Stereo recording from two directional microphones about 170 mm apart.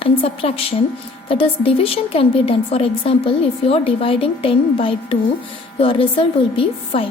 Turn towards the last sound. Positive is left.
turn(degrees=35)  # may be behind; listen again after turning